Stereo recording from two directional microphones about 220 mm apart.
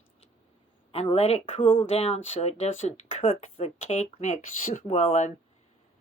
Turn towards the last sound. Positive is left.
turn(degrees=30)  # may be behind; listen again after turning